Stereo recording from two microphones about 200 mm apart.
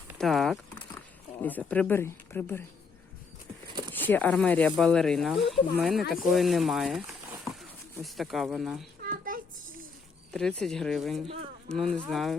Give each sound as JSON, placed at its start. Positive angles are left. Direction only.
{"t": 0.2, "sound": "speech", "side_deg": 0}
{"t": 3.9, "sound": "speech", "side_deg": 10}
{"t": 9.3, "sound": "a sound", "side_deg": -45}
{"t": 10.3, "sound": "speech", "side_deg": 5}